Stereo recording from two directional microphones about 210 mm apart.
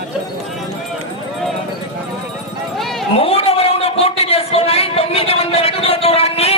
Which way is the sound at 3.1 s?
30° left (ahead or behind).